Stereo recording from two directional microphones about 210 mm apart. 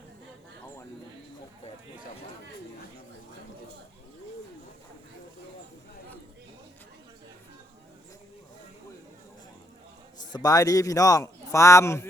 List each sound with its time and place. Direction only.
10.3 s speech: 15° left (ahead or behind)